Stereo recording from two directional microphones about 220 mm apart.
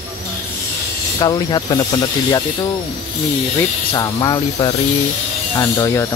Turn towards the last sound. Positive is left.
turn(degrees=15)  # may be behind; listen again after turning